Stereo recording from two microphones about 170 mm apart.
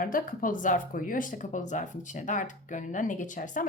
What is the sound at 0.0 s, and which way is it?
Speech, 55° left (ahead or behind).